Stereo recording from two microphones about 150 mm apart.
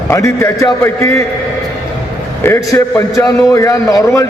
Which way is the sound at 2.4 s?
20° left (ahead or behind).